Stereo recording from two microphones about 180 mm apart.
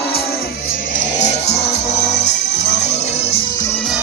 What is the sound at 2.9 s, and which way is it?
Music, 35° left (ahead or behind).